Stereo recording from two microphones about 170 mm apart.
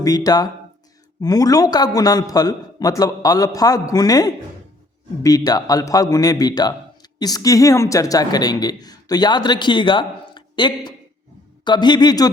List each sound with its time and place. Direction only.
0.0 s a man's voice: 20° left (ahead or behind)